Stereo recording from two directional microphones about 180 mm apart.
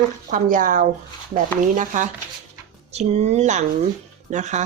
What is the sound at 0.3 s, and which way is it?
Speech, 45° right (ahead or behind).